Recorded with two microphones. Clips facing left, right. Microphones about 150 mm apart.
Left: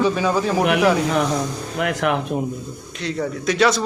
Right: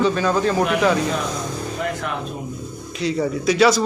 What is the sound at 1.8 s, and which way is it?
Speech, 75° left (ahead or behind).